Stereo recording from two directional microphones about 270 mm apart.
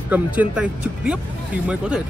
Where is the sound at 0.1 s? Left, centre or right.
Centre.